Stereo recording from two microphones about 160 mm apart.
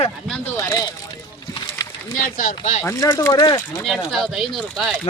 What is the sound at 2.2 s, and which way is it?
Speech, 55° left (ahead or behind).